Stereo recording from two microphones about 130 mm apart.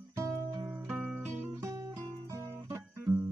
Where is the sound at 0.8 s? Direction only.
15° right (ahead or behind).